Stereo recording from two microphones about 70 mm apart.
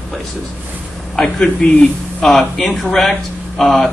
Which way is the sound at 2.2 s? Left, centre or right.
Centre.